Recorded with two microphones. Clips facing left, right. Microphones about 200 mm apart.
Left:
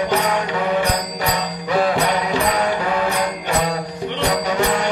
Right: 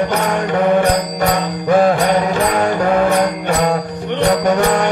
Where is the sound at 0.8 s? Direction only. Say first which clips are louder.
Right 6 dB; 50° right (ahead or behind).